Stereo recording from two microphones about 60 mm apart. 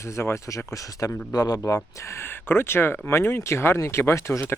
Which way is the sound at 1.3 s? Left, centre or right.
Left.